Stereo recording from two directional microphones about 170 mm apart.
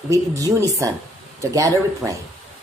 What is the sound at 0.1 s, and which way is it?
Speech, 20° right (ahead or behind).